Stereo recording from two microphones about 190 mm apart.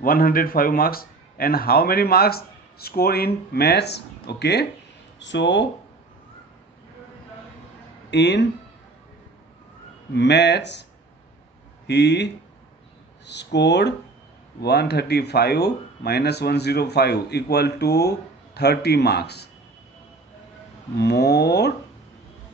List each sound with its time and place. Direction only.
0.0 s speech: 50° left (ahead or behind)
5.2 s speech: 70° left (ahead or behind)
8.1 s speech: 65° left (ahead or behind)
10.1 s speech: 65° left (ahead or behind)
11.9 s speech: 65° left (ahead or behind)
21.0 s speech: 60° left (ahead or behind)